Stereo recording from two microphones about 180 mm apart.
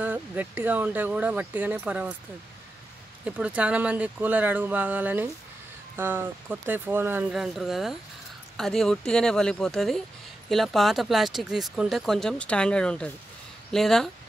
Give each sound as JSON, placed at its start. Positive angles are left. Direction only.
{"t": 0.0, "sound": "speech", "side_deg": -10}
{"t": 3.3, "sound": "speech", "side_deg": -5}